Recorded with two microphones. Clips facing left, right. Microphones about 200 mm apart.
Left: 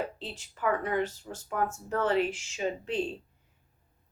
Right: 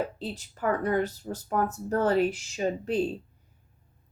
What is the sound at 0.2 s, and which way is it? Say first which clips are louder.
Speech: right 3 dB; 40° right (ahead or behind).